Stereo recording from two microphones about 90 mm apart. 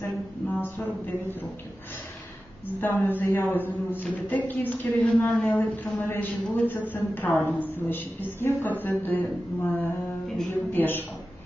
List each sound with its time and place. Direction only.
0.6 s a sound: 20° left (ahead or behind)
2.8 s a woman's voice: 20° left (ahead or behind)
5.0 s a woman's voice: 10° left (ahead or behind)
5.5 s a woman's voice: 25° left (ahead or behind)
10.2 s speech: centre (ahead or behind)
10.5 s a woman's voice: 25° left (ahead or behind)